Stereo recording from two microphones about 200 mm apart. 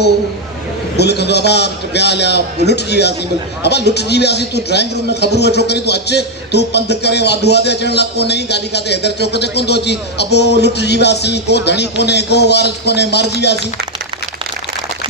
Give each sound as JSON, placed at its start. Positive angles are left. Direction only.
{"t": 0.9, "sound": "a man's voice", "side_deg": 55}